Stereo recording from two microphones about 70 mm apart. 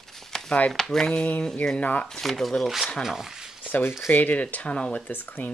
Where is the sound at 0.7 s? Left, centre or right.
Centre.